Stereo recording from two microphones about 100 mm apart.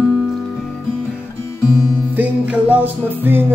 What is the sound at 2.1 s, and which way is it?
Music, 15° right (ahead or behind).